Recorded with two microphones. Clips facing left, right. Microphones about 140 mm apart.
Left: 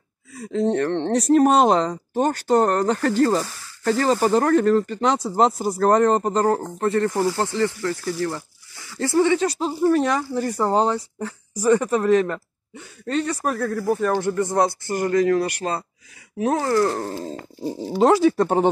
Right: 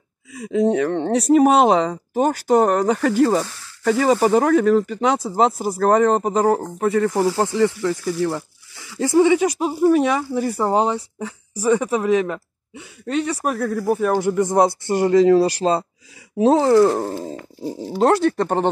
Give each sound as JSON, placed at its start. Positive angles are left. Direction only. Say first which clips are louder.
{"t": 0.4, "sound": "speech", "louder": "right 3 dB", "side_deg": -10}
{"t": 7.2, "sound": "speech", "louder": "right 3 dB", "side_deg": -20}
{"t": 16.9, "sound": "speech", "louder": "right 4 dB", "side_deg": -10}
{"t": 17.6, "sound": "speech", "louder": "even", "side_deg": 0}